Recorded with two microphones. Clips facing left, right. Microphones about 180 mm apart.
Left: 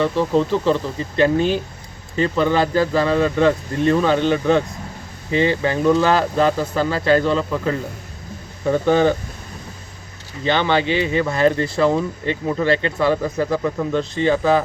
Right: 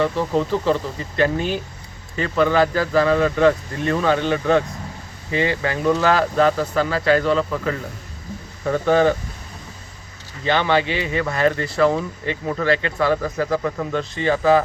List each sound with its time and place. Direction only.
0.0 s speech: 5° right (ahead or behind)
1.1 s speech: 25° left (ahead or behind)
6.3 s speech: centre (ahead or behind)
6.7 s speech: 30° left (ahead or behind)
7.3 s speech: centre (ahead or behind)
8.6 s speech: 20° left (ahead or behind)
10.4 s speech: 25° left (ahead or behind)